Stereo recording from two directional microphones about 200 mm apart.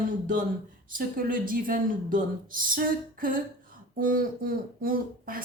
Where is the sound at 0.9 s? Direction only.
45° right (ahead or behind).